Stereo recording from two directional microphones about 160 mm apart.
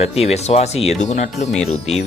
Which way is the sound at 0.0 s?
40° left (ahead or behind).